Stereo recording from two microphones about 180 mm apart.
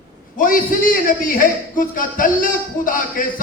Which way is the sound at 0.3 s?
50° left (ahead or behind).